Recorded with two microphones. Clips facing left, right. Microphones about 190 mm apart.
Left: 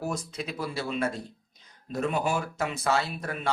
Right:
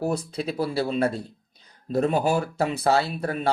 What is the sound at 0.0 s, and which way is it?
Speech, 35° right (ahead or behind).